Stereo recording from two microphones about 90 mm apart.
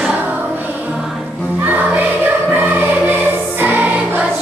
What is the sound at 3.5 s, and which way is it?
Music, 20° right (ahead or behind).